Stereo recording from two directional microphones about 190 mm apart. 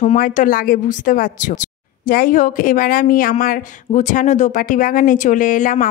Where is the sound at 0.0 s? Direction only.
40° left (ahead or behind).